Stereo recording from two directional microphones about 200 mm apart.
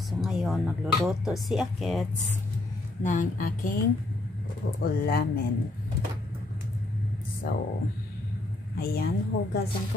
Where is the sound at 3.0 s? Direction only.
40° left (ahead or behind).